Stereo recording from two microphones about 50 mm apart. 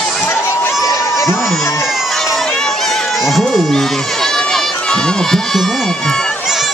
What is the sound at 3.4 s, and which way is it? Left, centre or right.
Crowd, centre.